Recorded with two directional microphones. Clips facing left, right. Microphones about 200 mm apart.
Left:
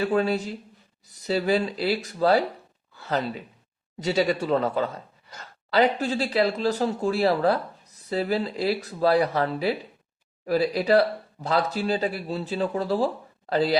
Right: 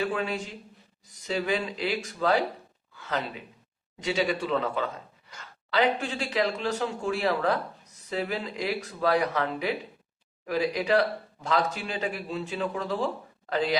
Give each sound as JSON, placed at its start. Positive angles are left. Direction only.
{"t": 0.1, "sound": "speech", "side_deg": 40}